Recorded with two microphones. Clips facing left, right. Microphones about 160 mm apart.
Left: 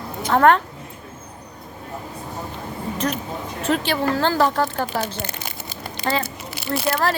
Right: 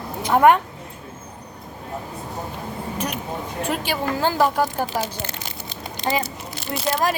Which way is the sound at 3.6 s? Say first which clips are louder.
Left 4 dB; 10° right (ahead or behind).